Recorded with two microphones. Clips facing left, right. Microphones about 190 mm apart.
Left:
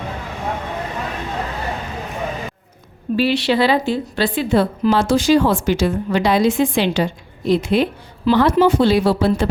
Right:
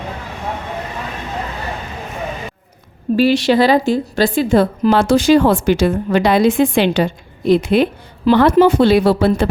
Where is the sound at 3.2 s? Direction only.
45° right (ahead or behind).